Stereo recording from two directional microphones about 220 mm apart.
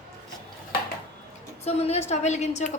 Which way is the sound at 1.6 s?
30° left (ahead or behind).